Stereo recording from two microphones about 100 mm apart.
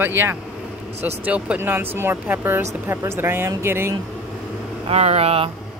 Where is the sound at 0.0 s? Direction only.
20° right (ahead or behind).